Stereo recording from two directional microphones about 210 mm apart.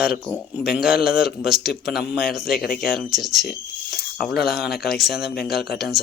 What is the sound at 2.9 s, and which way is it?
Speech, centre (ahead or behind).